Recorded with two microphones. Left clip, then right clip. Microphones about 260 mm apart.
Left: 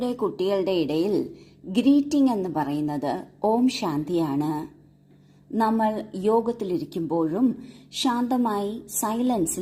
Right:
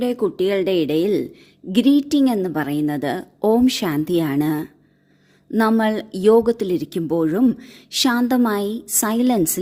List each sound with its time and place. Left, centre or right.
0.0 s a woman's voice: right